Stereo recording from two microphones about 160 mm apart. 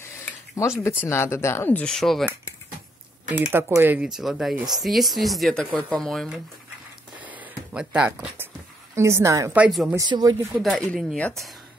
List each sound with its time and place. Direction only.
0.2 s speech: 20° left (ahead or behind); by 2.2 s centre (ahead or behind)
3.3 s speech: 10° right (ahead or behind)
7.2 s a sound: 10° right (ahead or behind)
8.9 s a woman's voice: 15° right (ahead or behind)
9.5 s a woman's voice: 5° right (ahead or behind)
9.9 s speech: 25° right (ahead or behind)
10.5 s speech: centre (ahead or behind)